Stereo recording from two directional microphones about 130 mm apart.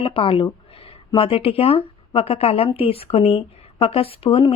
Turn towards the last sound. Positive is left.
turn(degrees=45)  # may be behind; listen again after turning